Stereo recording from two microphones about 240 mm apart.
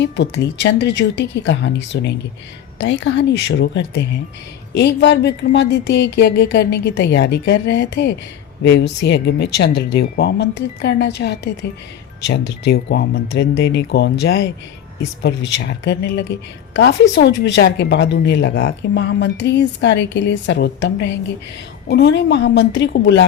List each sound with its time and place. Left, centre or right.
0.0 s speech: left